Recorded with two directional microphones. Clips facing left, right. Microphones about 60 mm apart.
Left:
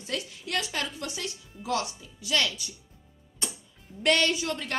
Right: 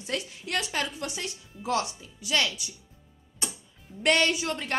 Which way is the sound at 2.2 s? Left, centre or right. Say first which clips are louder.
Even; centre.